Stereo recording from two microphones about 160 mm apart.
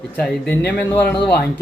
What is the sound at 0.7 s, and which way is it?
Speech, 10° left (ahead or behind).